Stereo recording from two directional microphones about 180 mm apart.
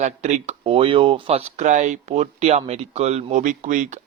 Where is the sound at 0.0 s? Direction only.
40° right (ahead or behind).